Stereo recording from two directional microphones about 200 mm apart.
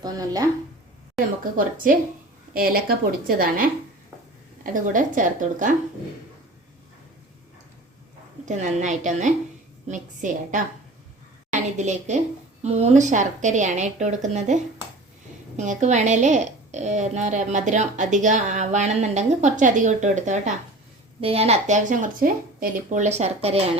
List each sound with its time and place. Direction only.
0.0 s speech: 20° right (ahead or behind)
1.5 s a woman's voice: 45° right (ahead or behind)
8.4 s a woman's voice: 35° right (ahead or behind)